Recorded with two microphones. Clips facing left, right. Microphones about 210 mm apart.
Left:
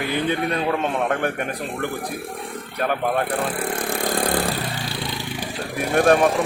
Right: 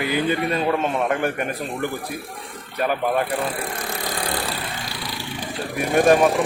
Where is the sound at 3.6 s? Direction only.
50° left (ahead or behind).